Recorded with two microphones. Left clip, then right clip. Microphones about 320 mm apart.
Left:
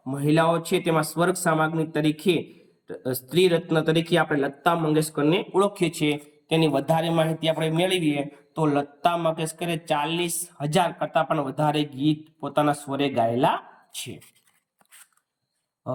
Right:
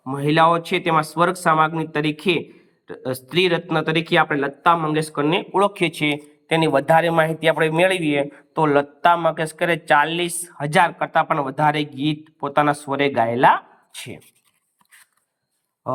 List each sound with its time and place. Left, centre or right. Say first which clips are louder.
0.2 s speech: right 5 dB; centre
2.5 s a sound: right 1 dB; right
3.0 s speech: right 2 dB; centre
5.4 s speech: right 4 dB; right
5.7 s speech: right 4 dB; centre
7.2 s speech: right 6 dB; right
7.7 s speech: right 6 dB; centre
12.4 s speech: right 7 dB; right
12.6 s speech: right 5 dB; centre